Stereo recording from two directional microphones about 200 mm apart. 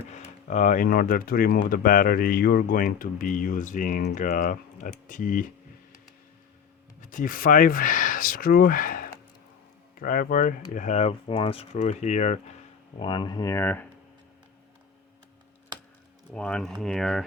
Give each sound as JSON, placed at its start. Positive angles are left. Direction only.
{"t": 0.4, "sound": "speech", "side_deg": 40}
{"t": 7.0, "sound": "speech", "side_deg": 40}
{"t": 13.0, "sound": "speech", "side_deg": 25}
{"t": 16.3, "sound": "speech", "side_deg": 5}